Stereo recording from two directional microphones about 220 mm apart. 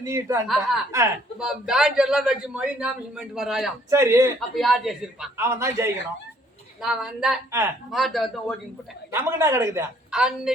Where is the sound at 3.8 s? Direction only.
15° right (ahead or behind).